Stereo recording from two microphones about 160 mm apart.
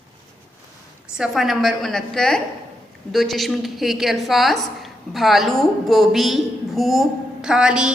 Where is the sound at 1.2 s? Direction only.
Centre (ahead or behind).